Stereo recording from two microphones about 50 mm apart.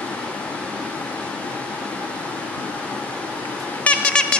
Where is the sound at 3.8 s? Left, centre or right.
Left.